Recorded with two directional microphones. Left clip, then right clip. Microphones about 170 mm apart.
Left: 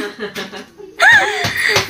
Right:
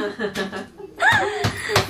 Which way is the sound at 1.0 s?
10° left (ahead or behind).